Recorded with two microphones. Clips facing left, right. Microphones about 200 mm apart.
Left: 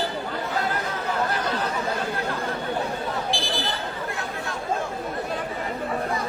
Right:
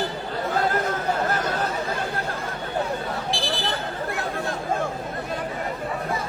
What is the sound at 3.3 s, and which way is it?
Buzzer, centre (ahead or behind).